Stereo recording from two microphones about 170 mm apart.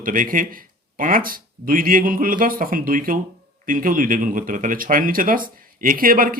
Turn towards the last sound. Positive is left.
turn(degrees=-55)  # may be behind; listen again after turning